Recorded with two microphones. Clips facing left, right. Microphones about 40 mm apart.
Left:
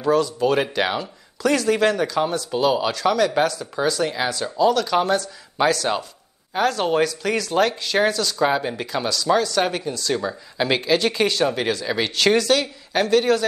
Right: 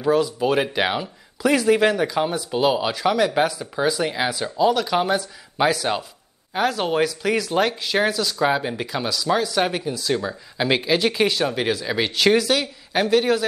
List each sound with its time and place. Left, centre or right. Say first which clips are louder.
0.0 s speech: even; centre